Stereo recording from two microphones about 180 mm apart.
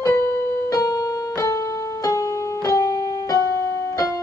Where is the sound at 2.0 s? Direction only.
20° left (ahead or behind).